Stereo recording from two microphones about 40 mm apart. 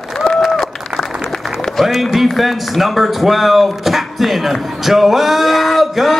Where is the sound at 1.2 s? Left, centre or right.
Centre.